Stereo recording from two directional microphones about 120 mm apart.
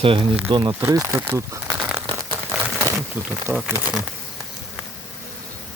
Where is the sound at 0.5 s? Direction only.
35° right (ahead or behind).